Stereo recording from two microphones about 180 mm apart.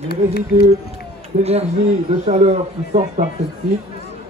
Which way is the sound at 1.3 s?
45° right (ahead or behind).